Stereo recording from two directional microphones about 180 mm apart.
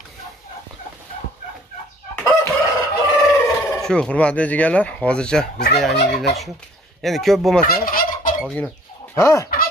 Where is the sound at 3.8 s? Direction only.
5° left (ahead or behind).